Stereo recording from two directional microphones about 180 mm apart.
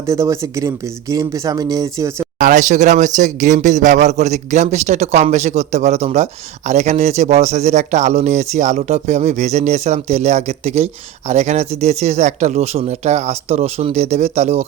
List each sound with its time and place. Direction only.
0.1 s speech: 15° right (ahead or behind)
2.4 s speech: 45° right (ahead or behind)